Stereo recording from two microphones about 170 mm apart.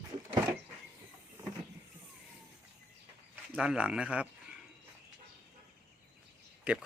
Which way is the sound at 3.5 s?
5° right (ahead or behind).